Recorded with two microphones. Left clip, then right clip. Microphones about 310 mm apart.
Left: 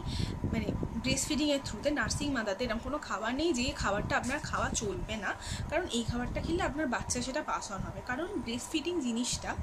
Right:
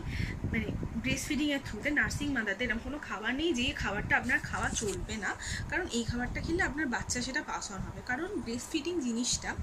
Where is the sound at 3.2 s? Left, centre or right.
Centre.